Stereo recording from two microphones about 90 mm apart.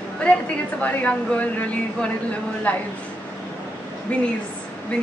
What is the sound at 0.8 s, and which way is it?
Speech, 15° left (ahead or behind).